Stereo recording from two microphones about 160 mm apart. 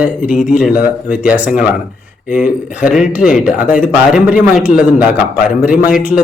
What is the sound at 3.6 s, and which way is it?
Speech, 55° left (ahead or behind).